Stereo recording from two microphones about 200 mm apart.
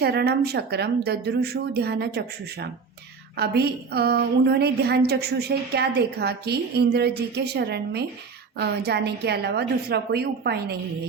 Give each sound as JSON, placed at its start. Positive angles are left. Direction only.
{"t": 0.0, "sound": "a woman's voice", "side_deg": -55}